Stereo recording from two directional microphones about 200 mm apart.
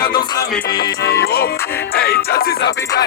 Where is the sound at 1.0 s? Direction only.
55° left (ahead or behind).